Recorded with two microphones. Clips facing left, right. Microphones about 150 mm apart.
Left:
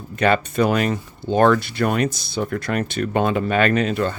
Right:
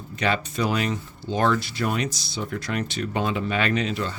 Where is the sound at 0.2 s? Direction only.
55° left (ahead or behind).